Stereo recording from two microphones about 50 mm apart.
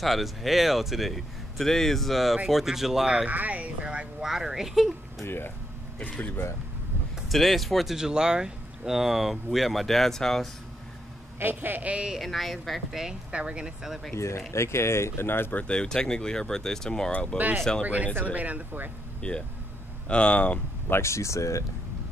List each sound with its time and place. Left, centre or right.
0.0 s speech: centre
3.3 s speech: right
4.2 s speech: centre
5.2 s speech: left
5.9 s speech: left
7.2 s speech: centre
11.3 s a woman's voice: right
12.2 s speech: centre
13.3 s speech: right
14.1 s speech: left
15.5 s speech: left
17.8 s a woman's voice: right
19.2 s speech: centre
20.9 s speech: left